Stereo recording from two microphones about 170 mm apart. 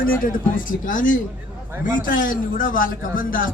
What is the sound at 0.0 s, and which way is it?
A man's voice, 55° left (ahead or behind).